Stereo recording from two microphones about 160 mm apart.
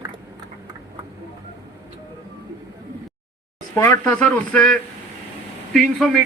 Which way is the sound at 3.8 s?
15° left (ahead or behind).